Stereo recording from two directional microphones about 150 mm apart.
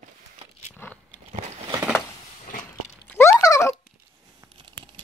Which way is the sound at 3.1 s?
15° left (ahead or behind).